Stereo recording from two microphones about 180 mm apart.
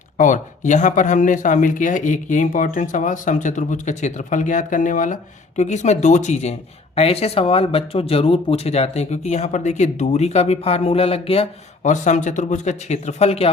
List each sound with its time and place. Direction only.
0.2 s speech: 45° left (ahead or behind)